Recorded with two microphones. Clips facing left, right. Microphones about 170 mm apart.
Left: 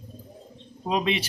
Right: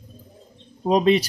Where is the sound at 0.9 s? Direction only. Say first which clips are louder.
Right 8 dB; 40° right (ahead or behind).